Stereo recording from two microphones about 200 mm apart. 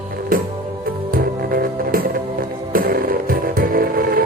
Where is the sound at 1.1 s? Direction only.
45° right (ahead or behind).